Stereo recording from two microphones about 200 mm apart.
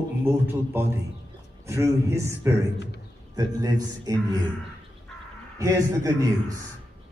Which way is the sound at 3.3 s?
20° right (ahead or behind).